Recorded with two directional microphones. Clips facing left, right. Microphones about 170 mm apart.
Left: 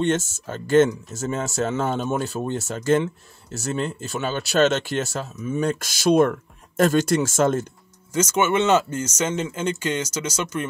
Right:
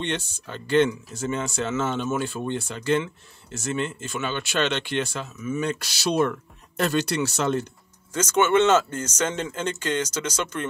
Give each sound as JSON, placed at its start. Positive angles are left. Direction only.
{"t": 0.0, "sound": "speech", "side_deg": 45}
{"t": 8.1, "sound": "speech", "side_deg": 10}